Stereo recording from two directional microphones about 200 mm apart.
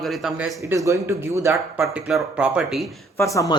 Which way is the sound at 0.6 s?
15° right (ahead or behind).